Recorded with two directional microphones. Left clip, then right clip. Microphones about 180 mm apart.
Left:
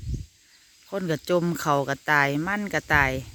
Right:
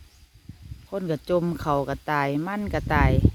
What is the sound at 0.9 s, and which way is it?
Speech, 5° left (ahead or behind).